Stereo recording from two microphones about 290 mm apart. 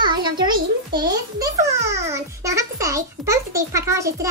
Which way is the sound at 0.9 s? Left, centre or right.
Centre.